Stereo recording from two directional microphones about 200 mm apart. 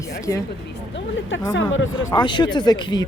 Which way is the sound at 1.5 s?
75° left (ahead or behind).